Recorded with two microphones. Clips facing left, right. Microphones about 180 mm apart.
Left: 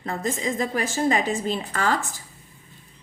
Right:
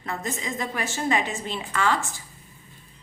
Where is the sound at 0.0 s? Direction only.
35° left (ahead or behind).